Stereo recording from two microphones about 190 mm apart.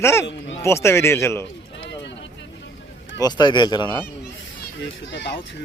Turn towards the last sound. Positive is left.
turn(degrees=65)  # may be behind; listen again after turning